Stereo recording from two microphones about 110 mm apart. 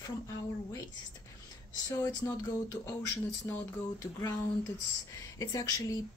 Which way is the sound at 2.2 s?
35° left (ahead or behind).